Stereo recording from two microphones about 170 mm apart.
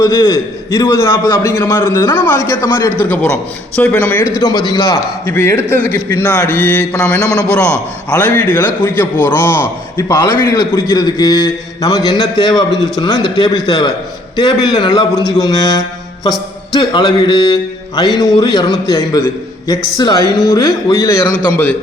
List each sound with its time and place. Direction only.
0.0 s a man's voice: 20° left (ahead or behind)